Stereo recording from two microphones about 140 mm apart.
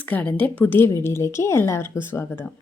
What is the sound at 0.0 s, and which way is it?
A woman's voice, 10° left (ahead or behind).